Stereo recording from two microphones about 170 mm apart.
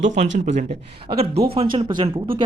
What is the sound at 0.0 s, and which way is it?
Speech, 45° right (ahead or behind).